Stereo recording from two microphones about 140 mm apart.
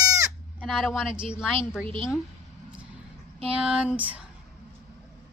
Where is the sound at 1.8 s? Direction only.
40° right (ahead or behind).